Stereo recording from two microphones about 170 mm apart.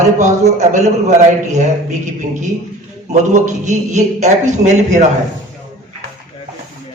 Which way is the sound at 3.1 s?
45° right (ahead or behind).